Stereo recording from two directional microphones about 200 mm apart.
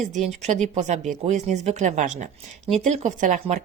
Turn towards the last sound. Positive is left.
turn(degrees=-35)  # may be behind; listen again after turning